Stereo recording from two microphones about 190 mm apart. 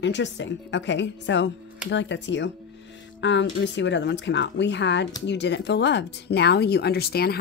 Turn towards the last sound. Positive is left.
turn(degrees=55)  # may be behind; listen again after turning